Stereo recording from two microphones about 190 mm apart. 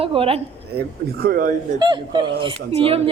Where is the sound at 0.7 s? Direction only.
50° right (ahead or behind).